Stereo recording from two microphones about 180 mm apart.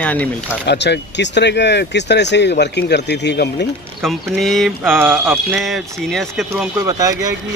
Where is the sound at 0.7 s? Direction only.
70° left (ahead or behind).